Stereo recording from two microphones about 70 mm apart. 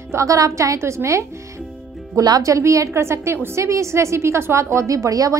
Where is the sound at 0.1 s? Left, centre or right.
Right.